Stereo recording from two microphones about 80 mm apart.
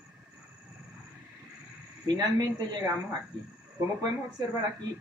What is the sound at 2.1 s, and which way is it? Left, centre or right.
A man's voice, right.